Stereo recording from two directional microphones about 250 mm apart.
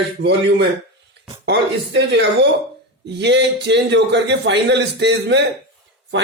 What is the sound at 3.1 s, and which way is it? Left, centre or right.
A man's voice, right.